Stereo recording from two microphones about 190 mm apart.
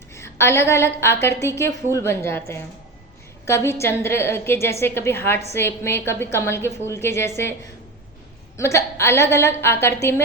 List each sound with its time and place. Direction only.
0.1 s a woman's voice: 15° left (ahead or behind)
8.5 s a woman's voice: 15° left (ahead or behind)